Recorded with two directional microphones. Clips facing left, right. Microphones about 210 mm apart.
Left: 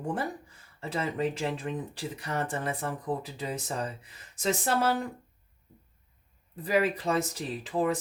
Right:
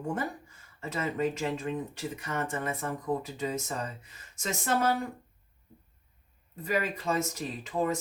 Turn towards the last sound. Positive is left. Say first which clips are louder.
# left 2 dB
turn(degrees=30)  # may be behind; listen again after turning